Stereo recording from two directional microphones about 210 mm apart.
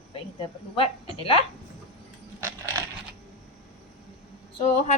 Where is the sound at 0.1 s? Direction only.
25° left (ahead or behind).